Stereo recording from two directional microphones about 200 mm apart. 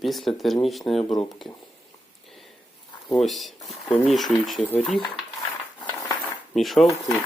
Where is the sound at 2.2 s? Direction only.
Centre (ahead or behind).